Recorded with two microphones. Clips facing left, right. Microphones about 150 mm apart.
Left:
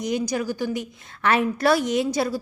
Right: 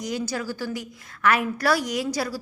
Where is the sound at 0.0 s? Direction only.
20° left (ahead or behind).